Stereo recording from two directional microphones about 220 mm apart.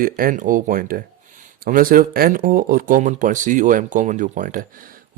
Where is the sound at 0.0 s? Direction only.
40° right (ahead or behind).